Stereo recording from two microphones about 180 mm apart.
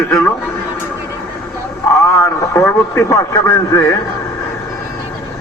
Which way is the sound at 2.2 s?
15° left (ahead or behind).